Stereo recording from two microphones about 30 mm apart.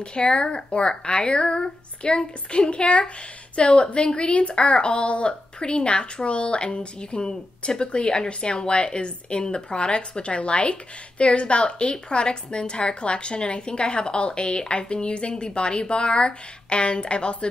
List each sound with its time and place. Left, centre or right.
0.0 s a woman's voice: left